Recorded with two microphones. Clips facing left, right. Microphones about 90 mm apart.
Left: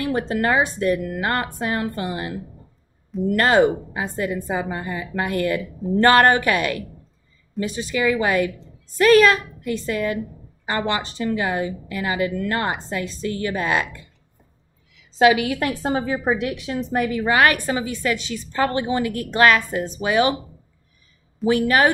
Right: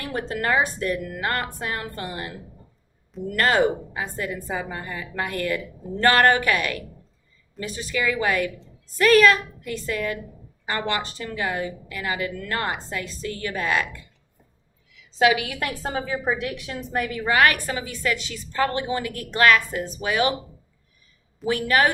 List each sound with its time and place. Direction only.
0.1 s a woman's voice: 25° left (ahead or behind)
3.3 s a woman's voice: 25° left (ahead or behind)
15.1 s a woman's voice: 30° left (ahead or behind)
15.6 s a woman's voice: 20° left (ahead or behind)
21.5 s a woman's voice: 25° left (ahead or behind)